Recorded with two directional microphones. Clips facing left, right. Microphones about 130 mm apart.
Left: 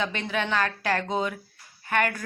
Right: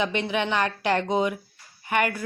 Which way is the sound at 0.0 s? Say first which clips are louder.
Right 3 dB; 15° right (ahead or behind).